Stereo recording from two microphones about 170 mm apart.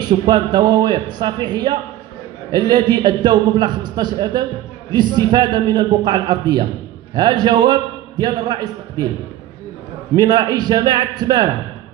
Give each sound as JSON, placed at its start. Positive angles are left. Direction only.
{"t": 0.0, "sound": "a man's voice", "side_deg": -25}
{"t": 10.1, "sound": "a man's voice", "side_deg": -25}